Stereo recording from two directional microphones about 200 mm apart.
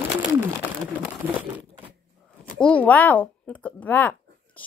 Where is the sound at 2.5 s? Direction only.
5° left (ahead or behind).